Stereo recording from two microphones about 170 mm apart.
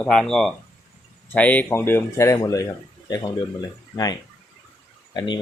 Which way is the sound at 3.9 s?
25° left (ahead or behind).